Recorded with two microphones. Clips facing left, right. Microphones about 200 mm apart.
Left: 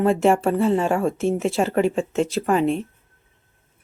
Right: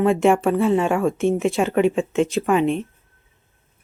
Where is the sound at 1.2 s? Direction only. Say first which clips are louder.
Right 2 dB; centre (ahead or behind).